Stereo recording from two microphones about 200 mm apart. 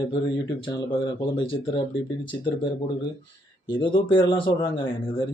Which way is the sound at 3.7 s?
25° left (ahead or behind).